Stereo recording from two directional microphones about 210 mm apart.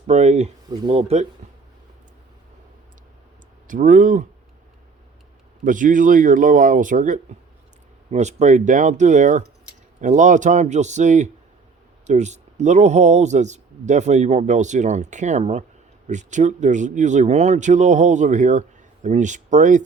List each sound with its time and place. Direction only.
0.1 s speech: 35° right (ahead or behind)
0.7 s speech: 20° right (ahead or behind)
3.7 s speech: 40° right (ahead or behind)
5.6 s speech: 40° right (ahead or behind)